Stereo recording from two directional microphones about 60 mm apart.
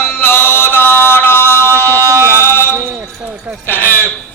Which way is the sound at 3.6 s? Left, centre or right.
Left.